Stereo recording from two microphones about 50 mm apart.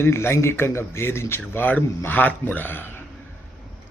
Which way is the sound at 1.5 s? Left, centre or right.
Left.